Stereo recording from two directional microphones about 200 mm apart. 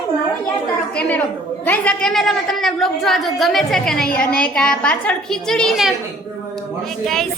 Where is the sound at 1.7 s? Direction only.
5° left (ahead or behind).